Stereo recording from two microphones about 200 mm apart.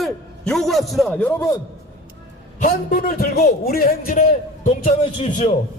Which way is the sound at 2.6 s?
40° left (ahead or behind).